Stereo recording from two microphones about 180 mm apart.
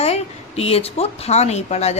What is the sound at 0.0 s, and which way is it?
A woman's voice, 35° left (ahead or behind).